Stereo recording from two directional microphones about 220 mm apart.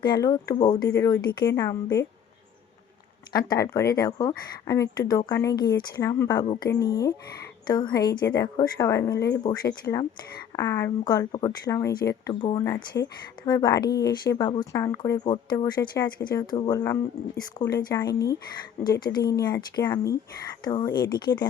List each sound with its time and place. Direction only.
0.0 s speech: 20° left (ahead or behind)
3.3 s speech: 15° left (ahead or behind)
9.1 s speech: 50° left (ahead or behind)
9.4 s speech: 20° left (ahead or behind)